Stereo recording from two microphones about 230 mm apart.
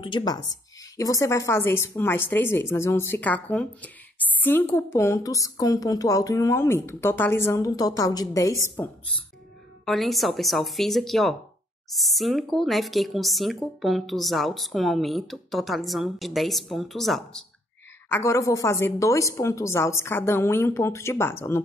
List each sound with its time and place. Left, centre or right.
0.0 s speech: centre
9.8 s speech: centre